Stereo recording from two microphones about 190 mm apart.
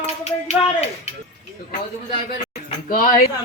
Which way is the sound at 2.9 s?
45° left (ahead or behind).